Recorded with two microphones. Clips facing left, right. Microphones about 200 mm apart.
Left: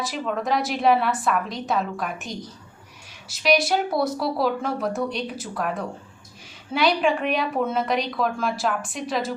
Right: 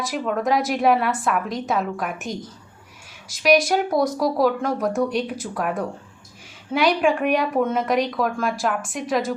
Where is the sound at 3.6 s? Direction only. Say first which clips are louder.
Right 3 dB; 5° left (ahead or behind).